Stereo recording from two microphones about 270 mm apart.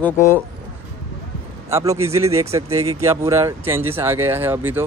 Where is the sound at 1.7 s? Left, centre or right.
Centre.